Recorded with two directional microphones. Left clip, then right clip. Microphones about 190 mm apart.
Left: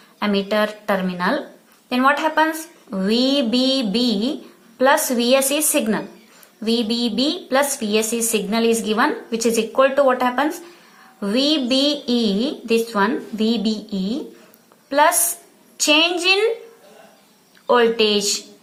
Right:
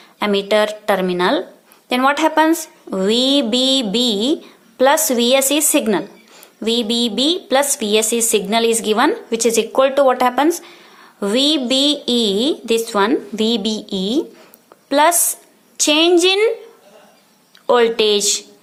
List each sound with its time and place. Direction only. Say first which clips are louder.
0.2 s speech: right 4 dB; 45° right (ahead or behind)
17.7 s speech: right 2 dB; 45° right (ahead or behind)